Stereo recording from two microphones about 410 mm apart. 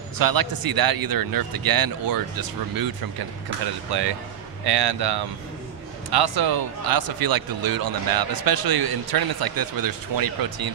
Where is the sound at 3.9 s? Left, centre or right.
Right.